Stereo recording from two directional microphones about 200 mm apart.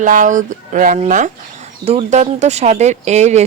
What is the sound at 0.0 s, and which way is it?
Speech, 40° right (ahead or behind).